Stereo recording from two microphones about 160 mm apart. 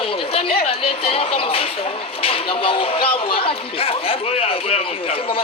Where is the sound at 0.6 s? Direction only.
35° left (ahead or behind).